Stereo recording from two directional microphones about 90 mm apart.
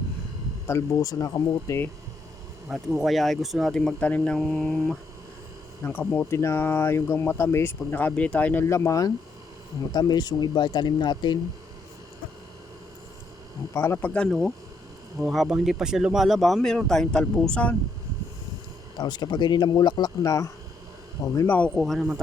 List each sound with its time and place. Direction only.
0.7 s speech: 40° left (ahead or behind)
3.0 s speech: centre (ahead or behind)
5.8 s speech: 20° left (ahead or behind)
8.7 s speech: 35° left (ahead or behind)
9.9 s speech: 50° left (ahead or behind)
13.7 s speech: 30° left (ahead or behind)
14.0 s speech: 10° left (ahead or behind)
15.2 s speech: 5° right (ahead or behind); by 17.7 s 15° left (ahead or behind)
18.9 s speech: 55° left (ahead or behind)
21.4 s speech: 20° left (ahead or behind)
21.8 s speech: centre (ahead or behind)